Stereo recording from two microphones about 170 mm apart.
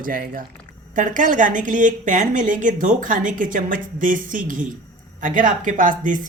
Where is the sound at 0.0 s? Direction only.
55° right (ahead or behind).